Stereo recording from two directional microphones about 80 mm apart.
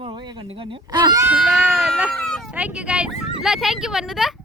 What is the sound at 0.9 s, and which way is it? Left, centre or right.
Speech, right.